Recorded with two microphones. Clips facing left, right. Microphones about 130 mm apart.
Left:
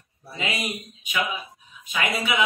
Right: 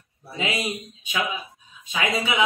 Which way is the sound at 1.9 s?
20° right (ahead or behind).